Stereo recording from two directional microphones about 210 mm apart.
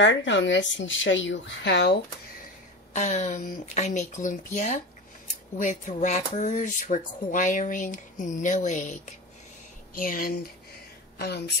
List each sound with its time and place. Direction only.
0.0 s speech: 60° left (ahead or behind)
2.9 s speech: 35° left (ahead or behind); by 11.5 s 50° left (ahead or behind)